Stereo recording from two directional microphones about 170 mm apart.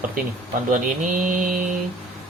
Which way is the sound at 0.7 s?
45° right (ahead or behind).